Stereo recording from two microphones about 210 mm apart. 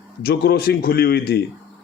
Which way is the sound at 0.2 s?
45° left (ahead or behind).